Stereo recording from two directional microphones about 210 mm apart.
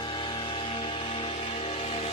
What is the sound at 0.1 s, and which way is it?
Music, 20° left (ahead or behind).